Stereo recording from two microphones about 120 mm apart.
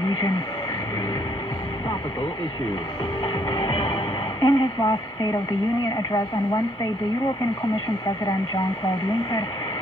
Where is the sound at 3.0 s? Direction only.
40° left (ahead or behind).